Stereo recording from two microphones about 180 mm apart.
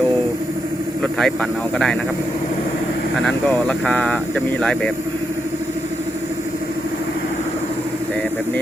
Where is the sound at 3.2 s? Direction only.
5° left (ahead or behind).